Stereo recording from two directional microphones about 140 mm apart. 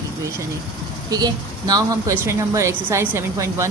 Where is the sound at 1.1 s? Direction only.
25° right (ahead or behind).